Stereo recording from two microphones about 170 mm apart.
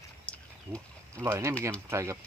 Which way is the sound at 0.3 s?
10° left (ahead or behind).